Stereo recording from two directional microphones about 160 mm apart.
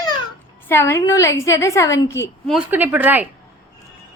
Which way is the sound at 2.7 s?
10° right (ahead or behind).